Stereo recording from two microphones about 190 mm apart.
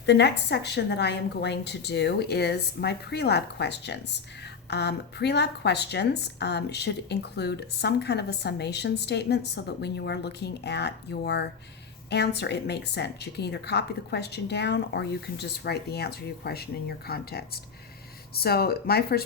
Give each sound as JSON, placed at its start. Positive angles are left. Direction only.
{"t": 0.0, "sound": "a woman's voice", "side_deg": 65}